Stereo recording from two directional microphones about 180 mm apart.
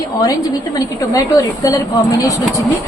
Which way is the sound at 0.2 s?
20° left (ahead or behind).